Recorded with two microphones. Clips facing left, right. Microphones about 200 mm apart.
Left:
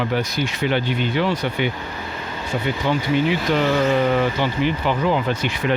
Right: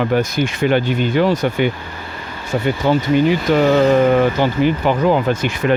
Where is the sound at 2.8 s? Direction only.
45° right (ahead or behind).